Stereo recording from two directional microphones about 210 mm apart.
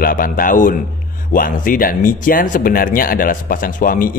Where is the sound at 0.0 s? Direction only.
40° left (ahead or behind).